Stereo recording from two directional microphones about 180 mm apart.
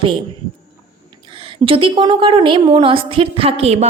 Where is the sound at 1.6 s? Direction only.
30° right (ahead or behind).